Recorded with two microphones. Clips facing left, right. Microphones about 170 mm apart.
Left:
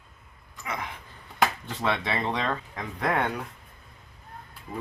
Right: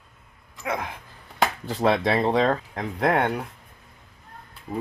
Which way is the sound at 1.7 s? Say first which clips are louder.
Right 7 dB; 35° right (ahead or behind).